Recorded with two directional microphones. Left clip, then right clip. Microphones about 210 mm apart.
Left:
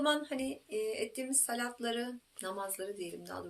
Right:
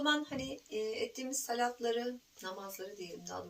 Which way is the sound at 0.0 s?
50° left (ahead or behind).